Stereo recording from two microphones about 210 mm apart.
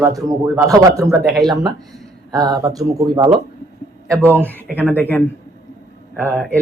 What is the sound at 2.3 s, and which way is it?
Speech, 15° right (ahead or behind).